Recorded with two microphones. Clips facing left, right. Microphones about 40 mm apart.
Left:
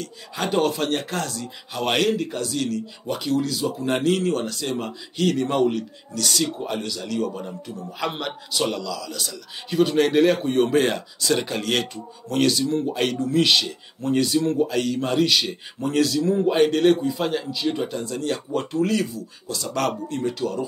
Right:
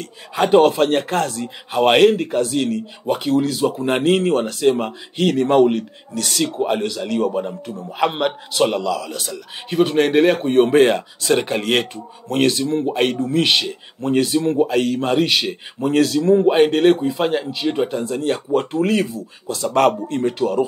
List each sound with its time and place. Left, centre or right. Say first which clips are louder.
0.0 s a man's voice: right 8 dB; right